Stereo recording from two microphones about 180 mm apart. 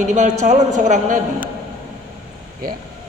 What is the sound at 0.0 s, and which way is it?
A woman's voice, 40° right (ahead or behind).